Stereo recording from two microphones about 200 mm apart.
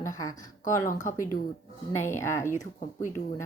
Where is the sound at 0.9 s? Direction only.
40° left (ahead or behind).